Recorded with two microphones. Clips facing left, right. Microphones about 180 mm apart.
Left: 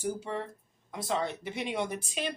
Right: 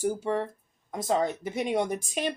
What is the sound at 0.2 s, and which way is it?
Speech, 50° right (ahead or behind).